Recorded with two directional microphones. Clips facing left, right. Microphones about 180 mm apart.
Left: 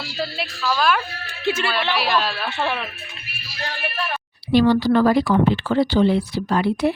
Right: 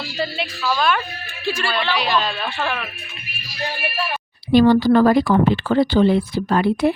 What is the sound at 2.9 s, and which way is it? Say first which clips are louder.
Speech: right 1 dB; 15° right (ahead or behind).